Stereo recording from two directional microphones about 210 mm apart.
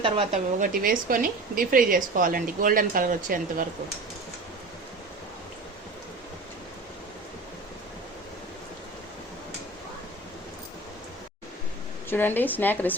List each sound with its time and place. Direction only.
0.0 s speech: 30° right (ahead or behind)
0.7 s a woman's voice: 40° right (ahead or behind)
12.1 s a woman's voice: 10° left (ahead or behind)